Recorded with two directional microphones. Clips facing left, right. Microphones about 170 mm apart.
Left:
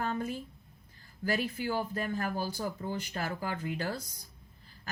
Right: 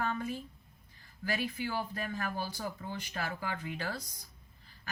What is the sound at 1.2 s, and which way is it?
Speech, 40° left (ahead or behind).